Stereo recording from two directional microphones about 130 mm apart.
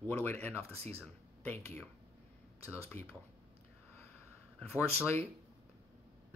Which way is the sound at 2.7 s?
20° left (ahead or behind).